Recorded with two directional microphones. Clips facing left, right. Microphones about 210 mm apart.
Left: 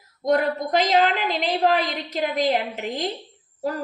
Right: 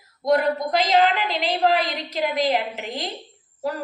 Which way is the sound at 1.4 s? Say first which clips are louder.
Even; 45° left (ahead or behind).